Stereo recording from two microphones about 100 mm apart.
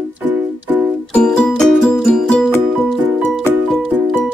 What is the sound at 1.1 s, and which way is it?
Music, 10° left (ahead or behind).